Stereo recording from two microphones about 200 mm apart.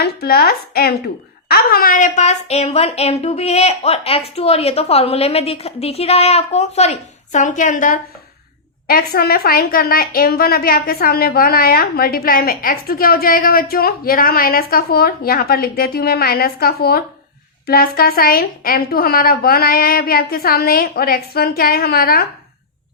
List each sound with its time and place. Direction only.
0.0 s a woman's voice: 50° left (ahead or behind)